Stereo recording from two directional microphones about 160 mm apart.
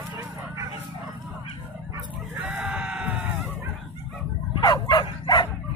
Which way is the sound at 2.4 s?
10° right (ahead or behind).